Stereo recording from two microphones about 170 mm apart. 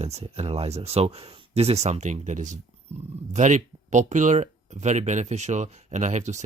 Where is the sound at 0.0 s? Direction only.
40° right (ahead or behind).